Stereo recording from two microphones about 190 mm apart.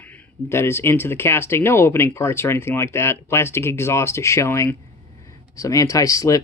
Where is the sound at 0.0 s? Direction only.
10° left (ahead or behind).